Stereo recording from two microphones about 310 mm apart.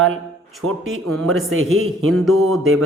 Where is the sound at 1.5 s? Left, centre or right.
Right.